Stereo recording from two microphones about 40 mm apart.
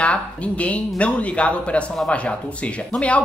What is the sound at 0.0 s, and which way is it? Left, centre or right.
A woman's voice, left.